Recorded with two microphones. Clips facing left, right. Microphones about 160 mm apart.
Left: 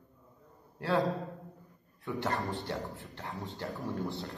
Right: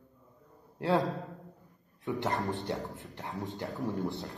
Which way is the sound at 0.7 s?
20° right (ahead or behind).